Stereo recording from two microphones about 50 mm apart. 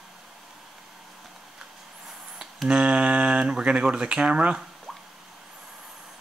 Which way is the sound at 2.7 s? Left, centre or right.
Right.